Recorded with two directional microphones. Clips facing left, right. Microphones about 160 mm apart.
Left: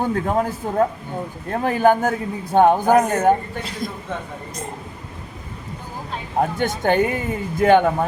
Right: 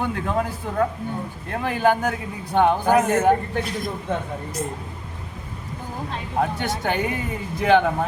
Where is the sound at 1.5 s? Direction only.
40° left (ahead or behind).